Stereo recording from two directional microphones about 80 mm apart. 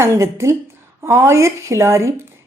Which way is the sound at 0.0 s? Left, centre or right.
Right.